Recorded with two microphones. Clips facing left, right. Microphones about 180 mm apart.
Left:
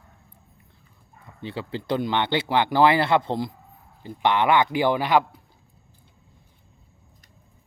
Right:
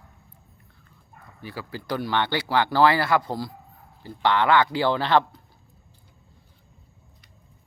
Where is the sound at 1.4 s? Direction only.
25° left (ahead or behind).